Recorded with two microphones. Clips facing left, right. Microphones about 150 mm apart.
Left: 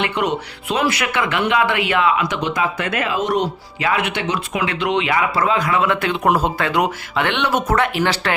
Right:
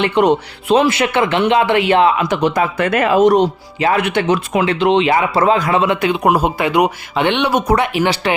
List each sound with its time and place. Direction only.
0.0 s speech: 30° right (ahead or behind)